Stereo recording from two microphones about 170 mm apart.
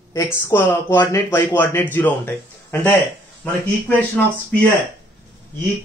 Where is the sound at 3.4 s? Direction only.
10° left (ahead or behind).